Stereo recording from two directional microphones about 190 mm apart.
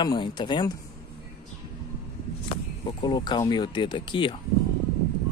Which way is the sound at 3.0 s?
25° left (ahead or behind).